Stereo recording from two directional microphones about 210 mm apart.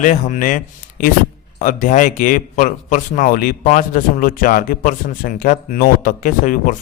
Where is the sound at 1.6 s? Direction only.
35° left (ahead or behind).